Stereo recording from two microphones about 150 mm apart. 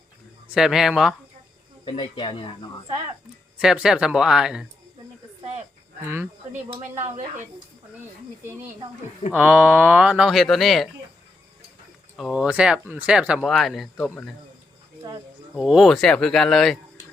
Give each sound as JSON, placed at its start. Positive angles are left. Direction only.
{"t": 0.5, "sound": "speech", "side_deg": -5}
{"t": 1.8, "sound": "speech", "side_deg": 35}
{"t": 3.6, "sound": "speech", "side_deg": -5}
{"t": 9.3, "sound": "speech", "side_deg": -5}
{"t": 12.1, "sound": "speech", "side_deg": -5}
{"t": 15.5, "sound": "speech", "side_deg": -5}